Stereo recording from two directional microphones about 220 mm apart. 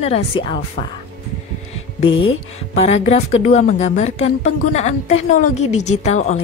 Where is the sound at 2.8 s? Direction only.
30° left (ahead or behind).